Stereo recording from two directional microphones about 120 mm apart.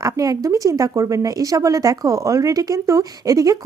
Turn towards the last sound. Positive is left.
turn(degrees=-30)  # may be behind; listen again after turning